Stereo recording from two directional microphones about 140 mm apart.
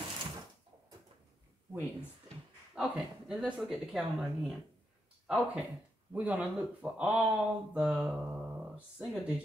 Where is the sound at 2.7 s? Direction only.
5° right (ahead or behind).